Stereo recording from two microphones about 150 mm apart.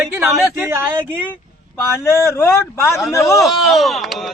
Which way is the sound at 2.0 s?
15° left (ahead or behind).